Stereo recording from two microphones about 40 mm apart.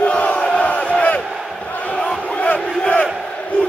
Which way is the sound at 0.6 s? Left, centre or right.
Left.